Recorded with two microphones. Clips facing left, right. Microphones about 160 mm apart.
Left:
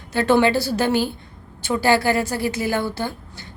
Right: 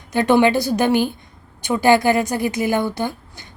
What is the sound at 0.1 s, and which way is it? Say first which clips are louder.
A woman's voice: right 2 dB; 15° right (ahead or behind).